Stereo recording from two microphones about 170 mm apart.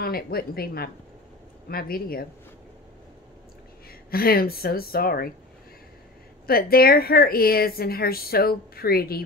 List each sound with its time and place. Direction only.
0.0 s a woman's voice: 65° left (ahead or behind)
4.1 s a woman's voice: 60° left (ahead or behind)
6.4 s a woman's voice: 60° left (ahead or behind)